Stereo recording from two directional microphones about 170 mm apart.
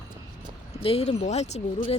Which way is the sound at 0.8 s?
40° left (ahead or behind).